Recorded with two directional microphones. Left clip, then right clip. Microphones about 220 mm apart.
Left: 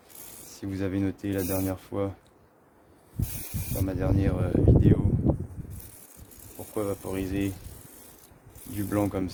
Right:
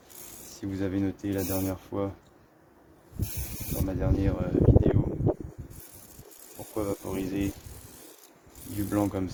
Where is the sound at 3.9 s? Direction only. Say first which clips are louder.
Left 1 dB; 35° left (ahead or behind).